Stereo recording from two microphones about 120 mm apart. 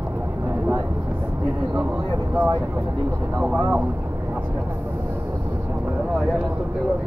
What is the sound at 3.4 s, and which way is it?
Speech, 15° right (ahead or behind).